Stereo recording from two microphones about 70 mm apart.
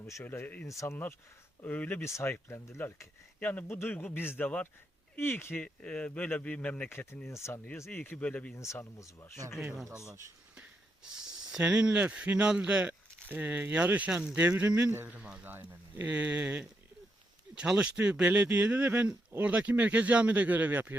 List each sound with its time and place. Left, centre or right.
0.3 s speech: left
0.7 s speech: left
1.6 s speech: left
2.0 s speech: left
3.4 s speech: left
3.7 s speech: left
5.6 s speech: centre
6.8 s speech: left
7.9 s speech: left
8.5 s speech: left
11.6 s speech: centre
17.6 s speech: centre; by 19.4 s right
19.4 s speech: centre